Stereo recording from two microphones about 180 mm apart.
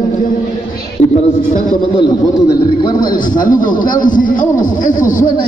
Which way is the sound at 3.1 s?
50° left (ahead or behind).